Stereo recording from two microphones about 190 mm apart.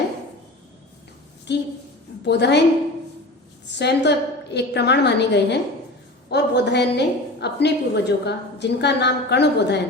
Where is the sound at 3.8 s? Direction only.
65° left (ahead or behind).